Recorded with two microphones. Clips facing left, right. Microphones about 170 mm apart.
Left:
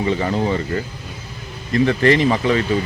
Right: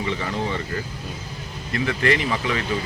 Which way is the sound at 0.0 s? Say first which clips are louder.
Left 7 dB; 35° left (ahead or behind).